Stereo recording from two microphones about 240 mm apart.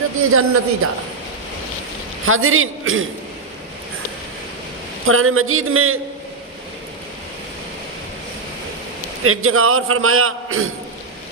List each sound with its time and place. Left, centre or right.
0.3 s a man's voice: right
2.2 s a man's voice: right
5.0 s a man's voice: right
9.2 s a man's voice: right